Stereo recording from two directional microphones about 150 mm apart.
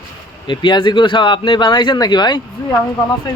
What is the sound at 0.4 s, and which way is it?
Speech, 30° left (ahead or behind).